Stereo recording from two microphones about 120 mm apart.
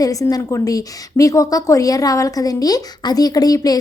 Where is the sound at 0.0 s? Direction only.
30° left (ahead or behind).